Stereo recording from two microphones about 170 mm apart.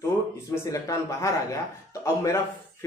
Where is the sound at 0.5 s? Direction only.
20° left (ahead or behind).